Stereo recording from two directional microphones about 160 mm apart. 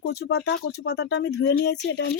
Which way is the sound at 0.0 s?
90° left.